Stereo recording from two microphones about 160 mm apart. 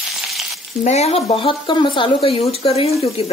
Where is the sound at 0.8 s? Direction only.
40° left (ahead or behind).